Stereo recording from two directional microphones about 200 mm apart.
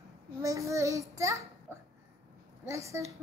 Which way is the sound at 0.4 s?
15° right (ahead or behind).